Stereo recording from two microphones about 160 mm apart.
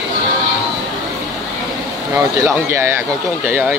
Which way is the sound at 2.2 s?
15° right (ahead or behind).